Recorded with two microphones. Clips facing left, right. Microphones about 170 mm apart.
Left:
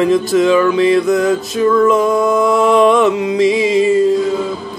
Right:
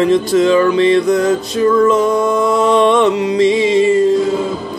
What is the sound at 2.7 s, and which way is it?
Music, 30° right (ahead or behind).